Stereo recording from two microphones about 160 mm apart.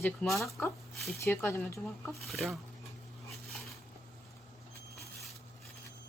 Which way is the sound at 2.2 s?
Centre (ahead or behind).